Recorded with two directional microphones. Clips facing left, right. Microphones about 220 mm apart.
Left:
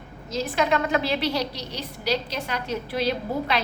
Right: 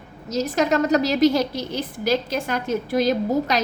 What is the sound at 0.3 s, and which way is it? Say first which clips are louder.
A woman's voice: right 3 dB; 40° right (ahead or behind).